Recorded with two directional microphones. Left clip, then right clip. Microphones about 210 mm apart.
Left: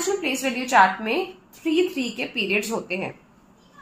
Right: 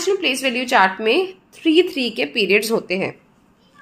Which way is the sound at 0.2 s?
55° right (ahead or behind).